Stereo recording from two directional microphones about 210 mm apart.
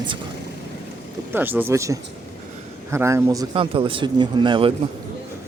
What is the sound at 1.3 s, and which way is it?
A man's voice, 10° right (ahead or behind).